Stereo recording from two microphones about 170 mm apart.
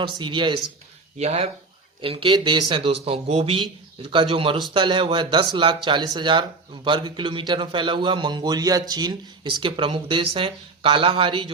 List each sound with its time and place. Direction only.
0.0 s a man's voice: 30° right (ahead or behind)
1.2 s a man's voice: 40° right (ahead or behind)